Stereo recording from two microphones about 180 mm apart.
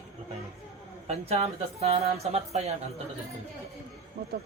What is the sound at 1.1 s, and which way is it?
Speech, 35° right (ahead or behind).